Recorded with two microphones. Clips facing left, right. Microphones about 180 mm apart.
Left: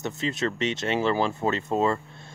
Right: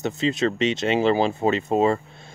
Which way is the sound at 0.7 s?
20° right (ahead or behind).